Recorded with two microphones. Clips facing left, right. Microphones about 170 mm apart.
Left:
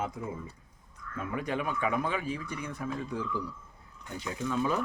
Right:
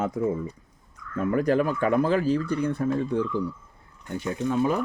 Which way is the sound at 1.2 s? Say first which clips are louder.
Right 11 dB; 40° right (ahead or behind).